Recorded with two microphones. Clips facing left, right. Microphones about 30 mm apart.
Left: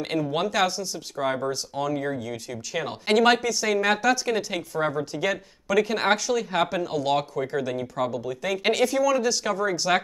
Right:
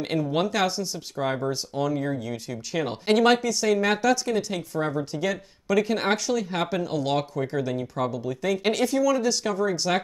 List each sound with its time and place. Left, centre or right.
0.3 s a woman's voice: centre